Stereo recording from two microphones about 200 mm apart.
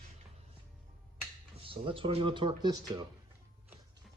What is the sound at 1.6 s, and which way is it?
Speech, 25° right (ahead or behind).